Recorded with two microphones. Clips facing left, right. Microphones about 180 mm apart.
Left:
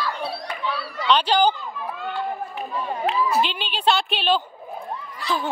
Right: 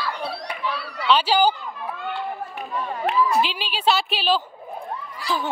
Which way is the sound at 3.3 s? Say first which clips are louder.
Even; 5° right (ahead or behind).